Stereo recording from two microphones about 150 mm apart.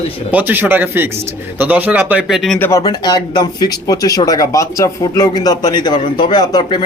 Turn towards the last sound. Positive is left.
turn(degrees=30)  # may be behind; listen again after turning